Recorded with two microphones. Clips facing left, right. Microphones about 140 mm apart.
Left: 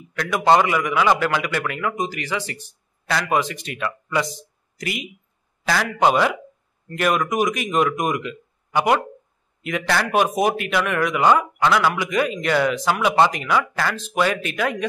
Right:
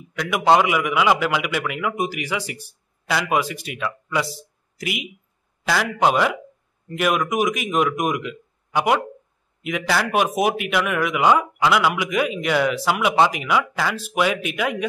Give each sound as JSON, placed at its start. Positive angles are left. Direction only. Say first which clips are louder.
{"t": 0.2, "sound": "a man's voice", "louder": "even", "side_deg": -5}